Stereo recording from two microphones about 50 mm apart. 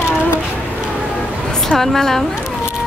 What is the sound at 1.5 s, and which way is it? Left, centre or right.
Speech, centre.